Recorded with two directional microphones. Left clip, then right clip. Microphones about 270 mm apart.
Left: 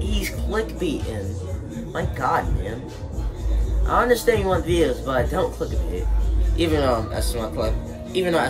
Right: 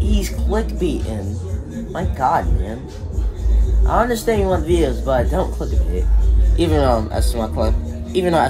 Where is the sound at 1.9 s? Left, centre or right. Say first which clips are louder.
Right 4 dB; centre.